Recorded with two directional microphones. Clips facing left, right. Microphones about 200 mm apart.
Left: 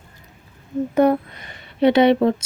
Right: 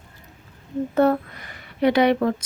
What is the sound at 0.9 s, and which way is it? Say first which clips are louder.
Speech: left 2 dB; 15° left (ahead or behind).